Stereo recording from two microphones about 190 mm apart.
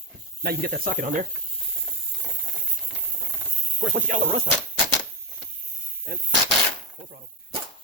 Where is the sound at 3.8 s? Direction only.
45° right (ahead or behind).